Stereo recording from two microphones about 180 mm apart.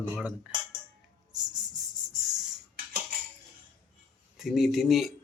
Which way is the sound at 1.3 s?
20° right (ahead or behind).